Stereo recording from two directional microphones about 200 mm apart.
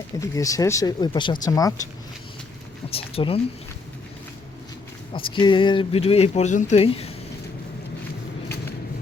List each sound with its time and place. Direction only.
0.2 s speech: 15° left (ahead or behind)
2.9 s speech: 30° left (ahead or behind)
5.1 s speech: 25° left (ahead or behind)